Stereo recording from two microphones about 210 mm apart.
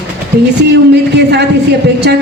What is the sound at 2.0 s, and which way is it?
Speech, 55° right (ahead or behind).